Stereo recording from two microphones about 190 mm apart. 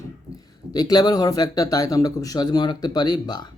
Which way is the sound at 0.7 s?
20° left (ahead or behind).